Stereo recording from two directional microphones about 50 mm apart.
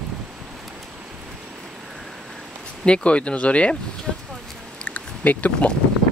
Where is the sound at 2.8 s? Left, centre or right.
Left.